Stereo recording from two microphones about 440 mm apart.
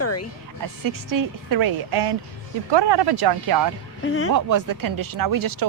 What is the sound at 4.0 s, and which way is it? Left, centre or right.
Speech, left.